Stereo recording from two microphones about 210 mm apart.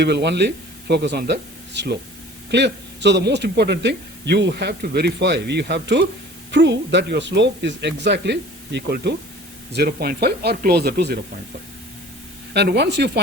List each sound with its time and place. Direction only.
0.0 s a man's voice: 55° right (ahead or behind)
12.5 s a man's voice: 55° right (ahead or behind)